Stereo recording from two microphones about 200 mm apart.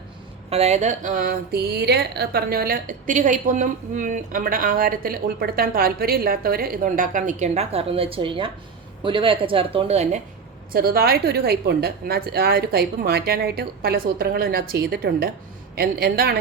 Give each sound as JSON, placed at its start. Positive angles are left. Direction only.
{"t": 0.5, "sound": "speech", "side_deg": -30}
{"t": 10.7, "sound": "speech", "side_deg": -50}